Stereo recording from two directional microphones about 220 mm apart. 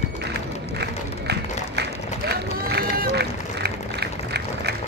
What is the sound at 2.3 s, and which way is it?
Run, 45° right (ahead or behind).